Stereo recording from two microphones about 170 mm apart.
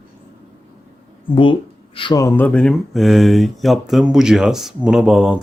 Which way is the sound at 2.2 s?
10° left (ahead or behind).